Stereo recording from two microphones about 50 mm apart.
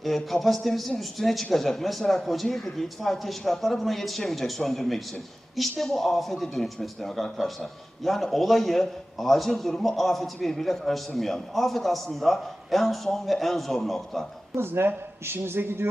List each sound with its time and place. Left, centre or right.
0.3 s a man's voice: centre
14.5 s speech: right